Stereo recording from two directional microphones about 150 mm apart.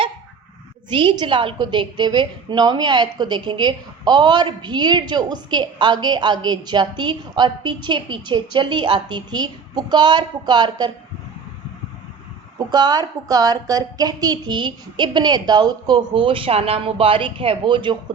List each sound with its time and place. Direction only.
0.9 s a woman's voice: 35° right (ahead or behind)
12.5 s a woman's voice: 30° right (ahead or behind)